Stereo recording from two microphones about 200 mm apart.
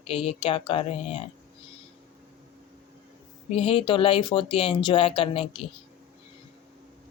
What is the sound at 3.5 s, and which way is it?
Speech, 30° left (ahead or behind).